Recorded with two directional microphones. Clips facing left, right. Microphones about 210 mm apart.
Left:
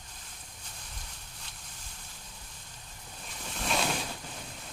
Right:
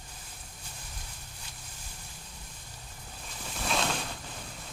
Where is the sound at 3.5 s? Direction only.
Centre (ahead or behind).